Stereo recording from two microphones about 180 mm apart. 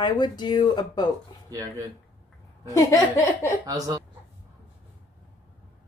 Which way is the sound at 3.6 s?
20° right (ahead or behind).